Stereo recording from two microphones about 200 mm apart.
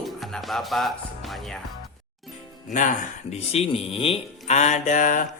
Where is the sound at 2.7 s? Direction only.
40° left (ahead or behind).